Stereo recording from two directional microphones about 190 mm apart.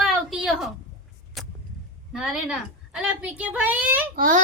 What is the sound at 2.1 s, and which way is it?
A child's voice, 5° right (ahead or behind).